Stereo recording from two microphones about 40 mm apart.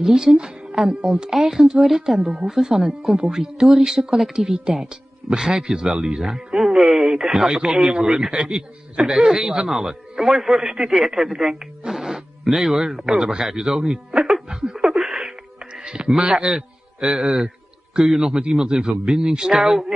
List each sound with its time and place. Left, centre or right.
0.0 s a man's voice: centre
11.8 s music: centre
13.1 s a man's voice: centre
14.3 s a sound: centre
15.6 s music: centre
16.1 s a man's voice: centre